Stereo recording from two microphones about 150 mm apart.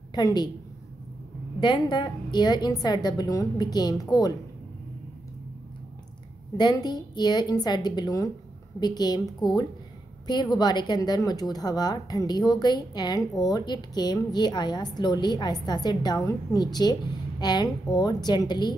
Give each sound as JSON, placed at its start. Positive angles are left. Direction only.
{"t": 0.1, "sound": "a woman's voice", "side_deg": 25}
{"t": 1.6, "sound": "speech", "side_deg": 30}
{"t": 6.5, "sound": "speech", "side_deg": 30}